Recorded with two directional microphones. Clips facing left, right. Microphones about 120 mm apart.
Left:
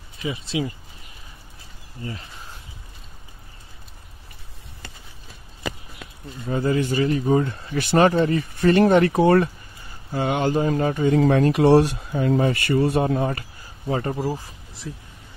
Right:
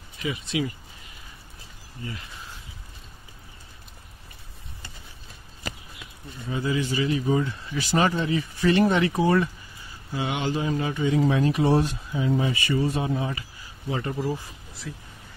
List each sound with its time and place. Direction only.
0.2 s speech: 30° left (ahead or behind)
2.0 s speech: 35° left (ahead or behind)
6.5 s speech: 50° left (ahead or behind)
10.1 s speech: 50° left (ahead or behind)
11.1 s speech: 60° left (ahead or behind); by 14.3 s 40° left (ahead or behind)
14.8 s speech: 20° left (ahead or behind)